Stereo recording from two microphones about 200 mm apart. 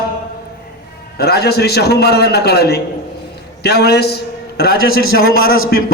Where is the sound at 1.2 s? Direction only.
50° left (ahead or behind).